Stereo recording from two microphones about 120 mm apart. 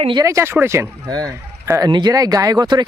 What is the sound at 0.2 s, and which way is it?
A man's voice, 25° right (ahead or behind).